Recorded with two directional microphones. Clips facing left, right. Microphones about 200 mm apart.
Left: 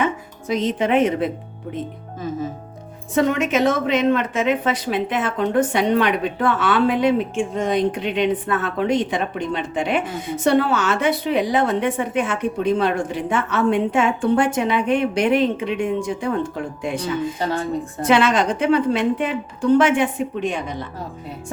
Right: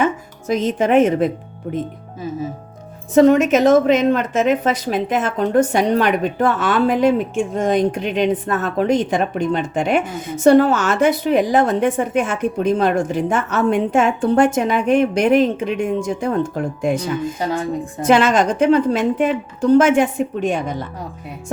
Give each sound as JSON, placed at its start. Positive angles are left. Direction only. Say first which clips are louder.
{"t": 0.0, "sound": "speech", "louder": "right 3 dB", "side_deg": -45}
{"t": 3.2, "sound": "a woman's voice", "louder": "right 6 dB", "side_deg": -40}
{"t": 18.0, "sound": "a woman's voice", "louder": "right 3 dB", "side_deg": -45}